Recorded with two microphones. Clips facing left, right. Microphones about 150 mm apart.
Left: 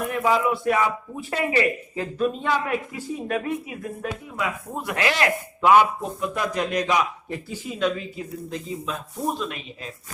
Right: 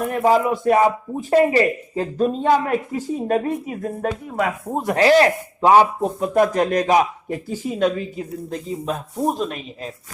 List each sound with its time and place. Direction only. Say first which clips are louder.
0.0 s speech: right 5 dB; 40° right (ahead or behind)